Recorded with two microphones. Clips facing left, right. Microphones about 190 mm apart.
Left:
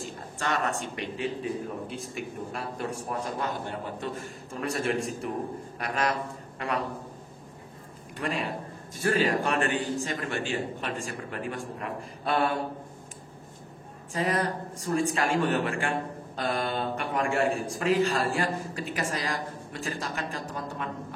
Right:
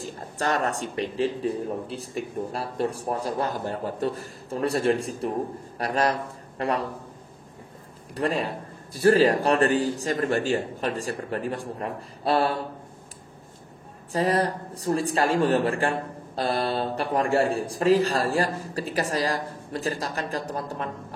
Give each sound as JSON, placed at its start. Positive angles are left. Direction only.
{"t": 0.0, "sound": "a man's voice", "side_deg": -40}
{"t": 8.2, "sound": "a man's voice", "side_deg": -35}
{"t": 14.1, "sound": "a man's voice", "side_deg": -35}